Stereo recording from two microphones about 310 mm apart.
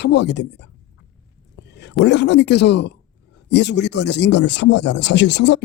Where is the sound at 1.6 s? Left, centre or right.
Left.